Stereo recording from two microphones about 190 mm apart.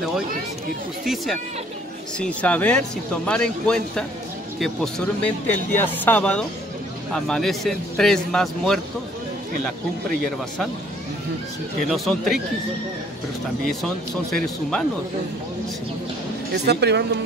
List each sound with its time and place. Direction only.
1.0 s speech: centre (ahead or behind)
11.9 s speech: centre (ahead or behind)
13.7 s speech: centre (ahead or behind)
16.5 s speech: 60° right (ahead or behind)